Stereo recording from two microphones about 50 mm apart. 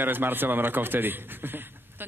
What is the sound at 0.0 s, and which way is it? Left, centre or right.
A man's voice, right.